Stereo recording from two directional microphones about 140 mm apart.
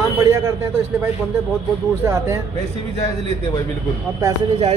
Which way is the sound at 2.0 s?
20° right (ahead or behind).